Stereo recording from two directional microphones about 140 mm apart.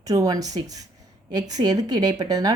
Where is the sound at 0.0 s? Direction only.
25° right (ahead or behind).